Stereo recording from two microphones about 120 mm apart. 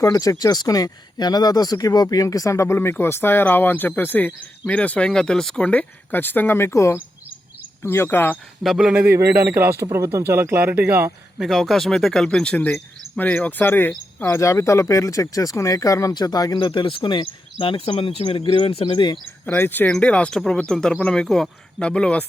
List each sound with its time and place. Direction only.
0.0 s speech: 30° left (ahead or behind)
8.6 s speech: 5° right (ahead or behind)
9.0 s speech: 20° right (ahead or behind)
11.3 s speech: centre (ahead or behind); by 19.1 s 40° left (ahead or behind)
19.5 s speech: 20° left (ahead or behind)